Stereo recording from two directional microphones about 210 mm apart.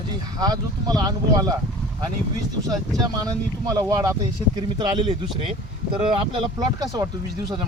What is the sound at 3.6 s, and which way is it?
Speech, 15° right (ahead or behind).